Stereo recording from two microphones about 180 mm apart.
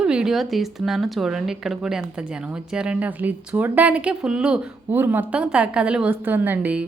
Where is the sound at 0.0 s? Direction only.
5° right (ahead or behind).